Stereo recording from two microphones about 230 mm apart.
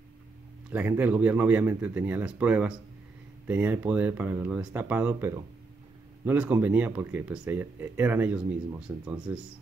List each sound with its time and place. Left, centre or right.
0.7 s speech: centre